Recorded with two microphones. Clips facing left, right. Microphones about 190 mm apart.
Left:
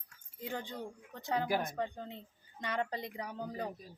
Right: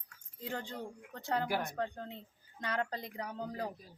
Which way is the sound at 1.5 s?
15° left (ahead or behind).